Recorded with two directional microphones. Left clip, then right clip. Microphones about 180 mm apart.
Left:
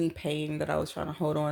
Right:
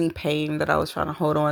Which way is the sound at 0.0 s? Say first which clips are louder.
Right 7 dB; 30° right (ahead or behind).